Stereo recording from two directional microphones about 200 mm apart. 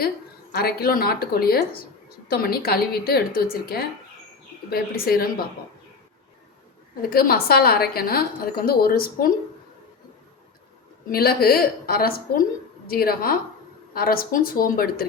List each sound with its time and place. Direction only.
0.5 s a woman's voice: 50° left (ahead or behind)
7.1 s a woman's voice: 50° left (ahead or behind)
11.1 s a woman's voice: 50° left (ahead or behind)